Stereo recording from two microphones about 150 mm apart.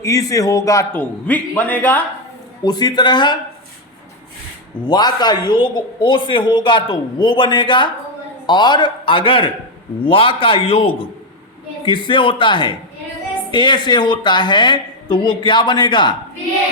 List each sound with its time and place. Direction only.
0.0 s a man's voice: 20° left (ahead or behind)
2.6 s a man's voice: 30° left (ahead or behind)
4.9 s a man's voice: 30° left (ahead or behind)